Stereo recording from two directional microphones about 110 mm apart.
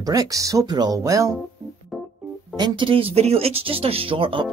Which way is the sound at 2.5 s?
45° right (ahead or behind).